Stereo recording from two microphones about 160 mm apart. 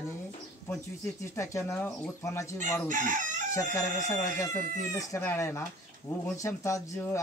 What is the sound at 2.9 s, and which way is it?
Chicken, 55° right (ahead or behind).